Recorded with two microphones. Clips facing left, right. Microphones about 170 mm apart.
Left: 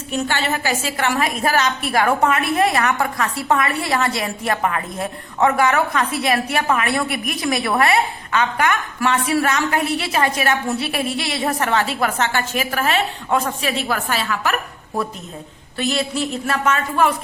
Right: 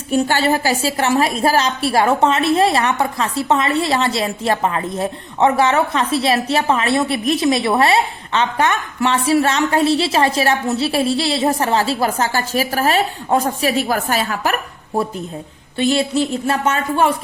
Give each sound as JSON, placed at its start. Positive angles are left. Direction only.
{"t": 0.1, "sound": "a woman's voice", "side_deg": -35}
{"t": 15.8, "sound": "a woman's voice", "side_deg": -30}